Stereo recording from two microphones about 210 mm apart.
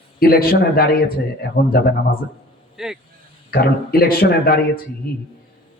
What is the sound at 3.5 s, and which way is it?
A man's voice, 45° left (ahead or behind).